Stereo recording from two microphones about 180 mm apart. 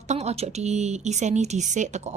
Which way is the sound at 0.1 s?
35° right (ahead or behind).